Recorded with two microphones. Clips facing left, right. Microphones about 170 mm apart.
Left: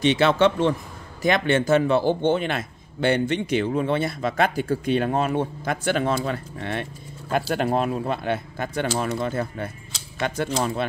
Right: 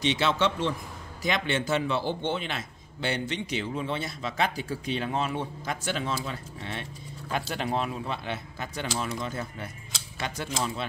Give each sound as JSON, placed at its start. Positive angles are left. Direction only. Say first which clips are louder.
{"t": 0.0, "sound": "a man's voice", "louder": "left 7 dB", "side_deg": 55}